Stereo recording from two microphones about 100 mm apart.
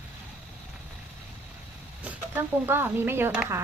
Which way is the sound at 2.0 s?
15° right (ahead or behind).